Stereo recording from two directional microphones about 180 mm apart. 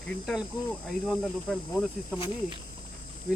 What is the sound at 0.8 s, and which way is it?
Speech, centre (ahead or behind).